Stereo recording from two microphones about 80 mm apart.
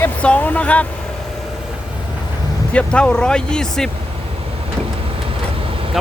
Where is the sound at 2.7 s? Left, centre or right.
Centre.